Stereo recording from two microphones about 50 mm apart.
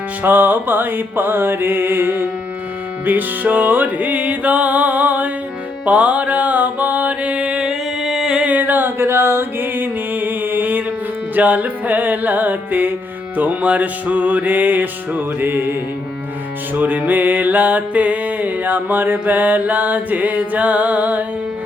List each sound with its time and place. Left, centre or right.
0.2 s music: right; by 8.4 s centre
8.4 s a sound: right
9.0 s music: right
16.7 s music: right